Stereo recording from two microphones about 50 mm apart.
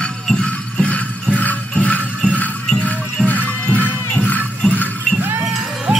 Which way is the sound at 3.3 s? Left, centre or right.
Left.